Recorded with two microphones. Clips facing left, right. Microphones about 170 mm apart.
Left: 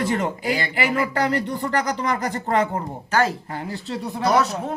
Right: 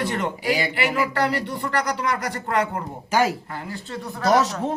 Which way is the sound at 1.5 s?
35° left (ahead or behind).